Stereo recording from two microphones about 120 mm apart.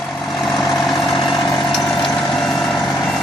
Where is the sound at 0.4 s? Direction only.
Centre (ahead or behind).